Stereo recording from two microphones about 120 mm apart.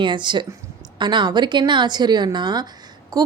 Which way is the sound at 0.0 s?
40° right (ahead or behind).